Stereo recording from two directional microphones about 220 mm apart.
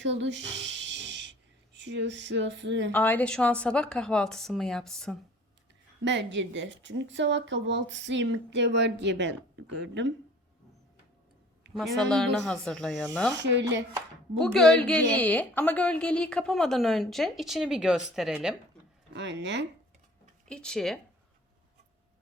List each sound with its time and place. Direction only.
0.0 s a sound: 55° right (ahead or behind)
1.7 s speech: 55° right (ahead or behind)
2.9 s a woman's voice: 10° left (ahead or behind)
6.1 s a woman's voice: 55° right (ahead or behind)
11.7 s a woman's voice: centre (ahead or behind)
13.4 s speech: 55° right (ahead or behind)
14.3 s a woman's voice: centre (ahead or behind)
19.1 s speech: 55° right (ahead or behind)
20.5 s a woman's voice: 5° left (ahead or behind)